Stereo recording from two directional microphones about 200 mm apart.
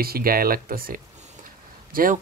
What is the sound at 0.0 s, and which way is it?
Speech, 45° right (ahead or behind).